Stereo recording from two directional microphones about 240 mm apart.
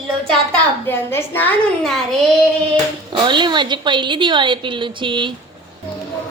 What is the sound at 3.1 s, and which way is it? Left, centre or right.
A woman's voice, centre.